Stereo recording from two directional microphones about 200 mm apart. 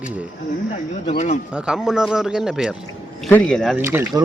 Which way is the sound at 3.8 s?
10° right (ahead or behind).